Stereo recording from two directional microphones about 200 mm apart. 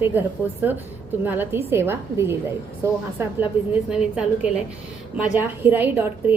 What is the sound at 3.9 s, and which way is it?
A woman's voice, 5° right (ahead or behind).